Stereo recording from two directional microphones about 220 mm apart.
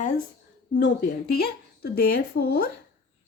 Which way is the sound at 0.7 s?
50° left (ahead or behind).